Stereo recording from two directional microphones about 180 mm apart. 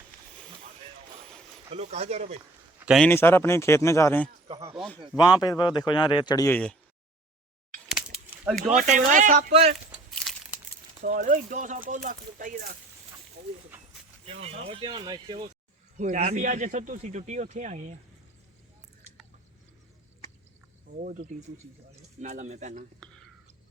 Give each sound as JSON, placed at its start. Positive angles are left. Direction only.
{"t": 1.7, "sound": "speech", "side_deg": -35}
{"t": 2.7, "sound": "a sound", "side_deg": -5}
{"t": 3.0, "sound": "speech", "side_deg": 10}
{"t": 4.8, "sound": "a man's voice", "side_deg": 0}
{"t": 5.1, "sound": "a man's voice", "side_deg": 20}
{"t": 7.9, "sound": "a sound", "side_deg": -5}
{"t": 8.7, "sound": "speech", "side_deg": -45}
{"t": 11.0, "sound": "speech", "side_deg": -50}
{"t": 13.7, "sound": "a sound", "side_deg": -10}
{"t": 14.4, "sound": "speech", "side_deg": -30}
{"t": 16.0, "sound": "speech", "side_deg": -40}
{"t": 21.0, "sound": "speech", "side_deg": -50}